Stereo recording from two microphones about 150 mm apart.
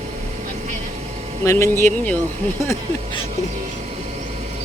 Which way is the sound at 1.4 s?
20° left (ahead or behind).